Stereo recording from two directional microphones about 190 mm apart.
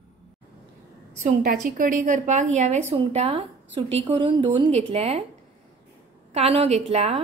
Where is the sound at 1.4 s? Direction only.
45° right (ahead or behind).